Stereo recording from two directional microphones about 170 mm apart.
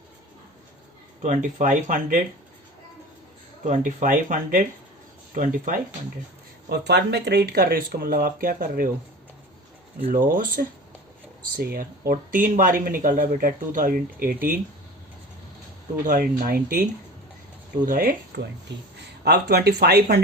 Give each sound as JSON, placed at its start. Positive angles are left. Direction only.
{"t": 1.2, "sound": "speech", "side_deg": -45}
{"t": 3.6, "sound": "speech", "side_deg": -50}
{"t": 6.7, "sound": "speech", "side_deg": -75}
{"t": 10.0, "sound": "speech", "side_deg": -45}
{"t": 16.0, "sound": "speech", "side_deg": -55}
{"t": 17.8, "sound": "speech", "side_deg": -60}
{"t": 18.3, "sound": "speech", "side_deg": -75}
{"t": 18.7, "sound": "speech", "side_deg": -90}
{"t": 19.2, "sound": "speech", "side_deg": -75}